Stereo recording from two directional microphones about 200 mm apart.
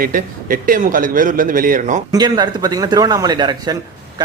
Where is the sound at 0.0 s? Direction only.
45° right (ahead or behind).